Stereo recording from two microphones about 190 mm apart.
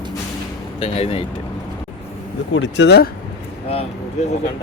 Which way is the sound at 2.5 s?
70° left (ahead or behind).